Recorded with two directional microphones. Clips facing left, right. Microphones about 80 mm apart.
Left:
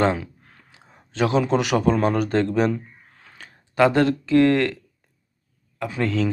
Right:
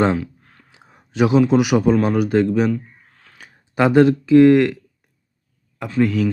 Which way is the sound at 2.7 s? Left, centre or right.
Centre.